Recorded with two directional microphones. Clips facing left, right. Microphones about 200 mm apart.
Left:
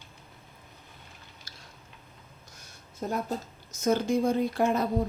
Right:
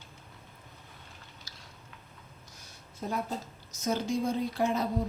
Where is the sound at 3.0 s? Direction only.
45° left (ahead or behind).